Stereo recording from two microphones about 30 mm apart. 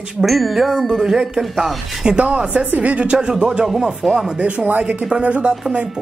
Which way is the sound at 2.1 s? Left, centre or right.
Right.